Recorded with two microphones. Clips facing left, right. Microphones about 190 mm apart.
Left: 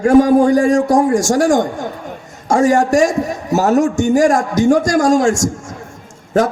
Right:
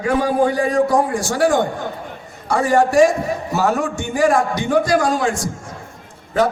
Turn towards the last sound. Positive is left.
turn(degrees=45)  # may be behind; listen again after turning